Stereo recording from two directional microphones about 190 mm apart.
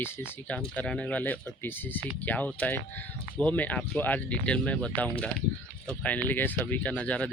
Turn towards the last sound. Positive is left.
turn(degrees=5)  # may be behind; listen again after turning